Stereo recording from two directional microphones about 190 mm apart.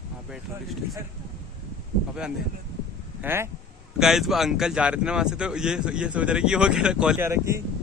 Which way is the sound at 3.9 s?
Centre (ahead or behind).